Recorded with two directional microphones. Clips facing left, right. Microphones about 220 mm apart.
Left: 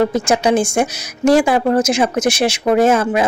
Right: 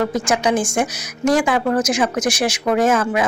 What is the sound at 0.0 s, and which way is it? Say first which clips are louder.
Speech: left 4 dB; 30° left (ahead or behind).